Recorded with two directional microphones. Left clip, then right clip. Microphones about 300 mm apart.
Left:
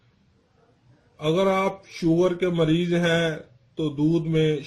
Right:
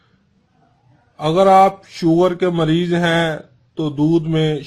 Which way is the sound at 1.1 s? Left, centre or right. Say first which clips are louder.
Right 11 dB; right.